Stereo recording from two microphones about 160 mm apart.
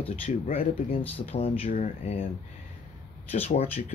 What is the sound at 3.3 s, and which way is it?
Speech, 40° left (ahead or behind).